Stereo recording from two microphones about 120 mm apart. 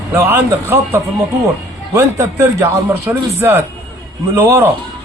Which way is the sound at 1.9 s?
25° right (ahead or behind).